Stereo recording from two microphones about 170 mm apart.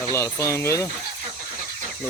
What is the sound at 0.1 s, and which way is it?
Speech, 15° left (ahead or behind).